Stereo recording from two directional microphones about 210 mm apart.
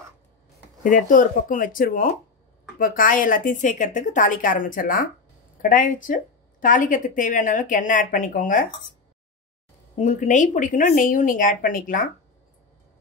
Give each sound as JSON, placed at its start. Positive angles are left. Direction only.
{"t": 0.8, "sound": "a woman's voice", "side_deg": 40}
{"t": 9.9, "sound": "a woman's voice", "side_deg": 35}